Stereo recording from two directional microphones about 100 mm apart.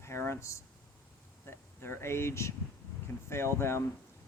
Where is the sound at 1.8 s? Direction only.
25° left (ahead or behind).